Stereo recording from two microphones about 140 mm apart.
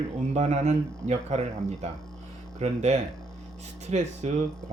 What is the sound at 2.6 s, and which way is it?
Speech, 50° right (ahead or behind).